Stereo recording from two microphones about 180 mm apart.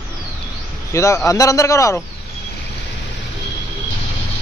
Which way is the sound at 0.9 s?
15° left (ahead or behind).